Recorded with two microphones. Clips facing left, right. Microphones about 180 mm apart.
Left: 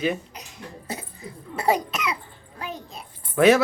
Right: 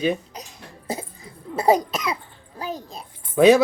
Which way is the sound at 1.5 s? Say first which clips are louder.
Right 4 dB; 35° right (ahead or behind).